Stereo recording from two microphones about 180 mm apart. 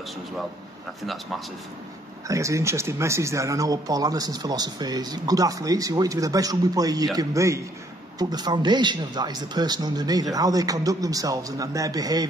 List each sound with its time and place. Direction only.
1.0 s speech: centre (ahead or behind)
2.2 s a man's voice: 15° right (ahead or behind)